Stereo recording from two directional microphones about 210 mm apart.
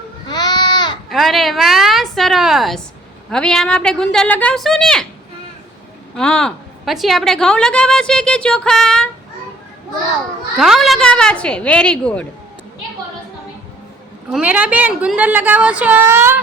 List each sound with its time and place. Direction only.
0.3 s goat: 20° left (ahead or behind)
1.1 s a sound: centre (ahead or behind)
3.2 s a woman's voice: 5° left (ahead or behind)
6.1 s a woman's voice: 5° left (ahead or behind)
10.6 s a woman's voice: centre (ahead or behind)
14.3 s a woman's voice: 5° right (ahead or behind)